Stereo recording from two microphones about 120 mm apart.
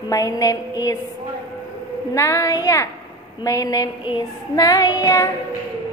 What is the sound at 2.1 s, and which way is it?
Speech, 25° left (ahead or behind).